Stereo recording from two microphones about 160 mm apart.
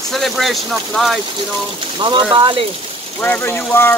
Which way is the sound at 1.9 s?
30° right (ahead or behind).